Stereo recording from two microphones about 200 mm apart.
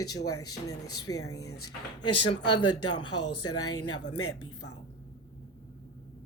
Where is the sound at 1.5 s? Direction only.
90° left.